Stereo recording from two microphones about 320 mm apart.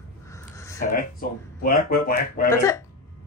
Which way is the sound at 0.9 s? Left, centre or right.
Left.